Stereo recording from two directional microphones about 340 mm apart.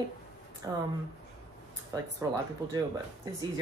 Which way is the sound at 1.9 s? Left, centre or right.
Centre.